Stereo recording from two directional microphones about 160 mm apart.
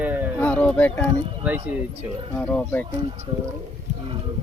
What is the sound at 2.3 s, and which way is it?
Speech, 10° left (ahead or behind).